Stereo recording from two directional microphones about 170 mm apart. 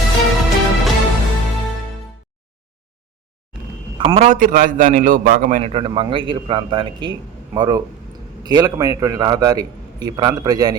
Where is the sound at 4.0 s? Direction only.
35° right (ahead or behind).